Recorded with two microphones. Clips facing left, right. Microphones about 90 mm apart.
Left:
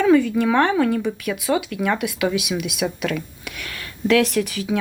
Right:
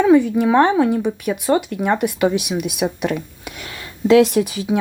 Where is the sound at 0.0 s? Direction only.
20° right (ahead or behind).